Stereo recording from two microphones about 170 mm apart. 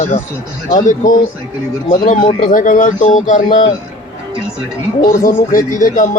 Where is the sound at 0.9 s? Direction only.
50° left (ahead or behind).